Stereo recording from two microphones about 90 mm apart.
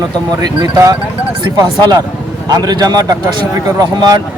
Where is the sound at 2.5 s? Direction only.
50° right (ahead or behind).